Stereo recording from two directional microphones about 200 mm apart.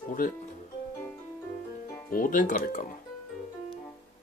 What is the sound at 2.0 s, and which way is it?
Speech, 45° left (ahead or behind).